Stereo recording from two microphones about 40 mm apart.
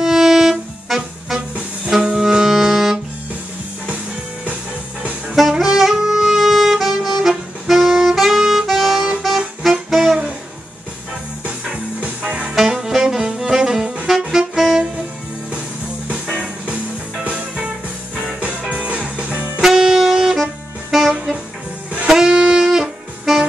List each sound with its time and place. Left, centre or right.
0.0 s music: centre
2.3 s saxophone: centre
5.6 s saxophone: centre
8.4 s music: centre
9.6 s saxophone: centre
11.4 s music: right
12.5 s saxophone: centre
16.6 s music: right
19.6 s saxophone: centre
22.1 s wind instrument: centre
22.4 s saxophone: centre